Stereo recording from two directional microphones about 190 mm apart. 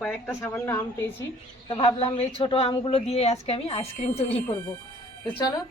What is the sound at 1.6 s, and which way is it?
A woman's voice, 30° left (ahead or behind).